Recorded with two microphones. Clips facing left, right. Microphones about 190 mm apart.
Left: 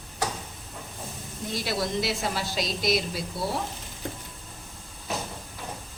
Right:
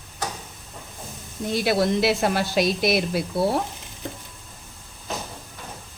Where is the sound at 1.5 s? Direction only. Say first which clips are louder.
Right 8 dB; 60° right (ahead or behind).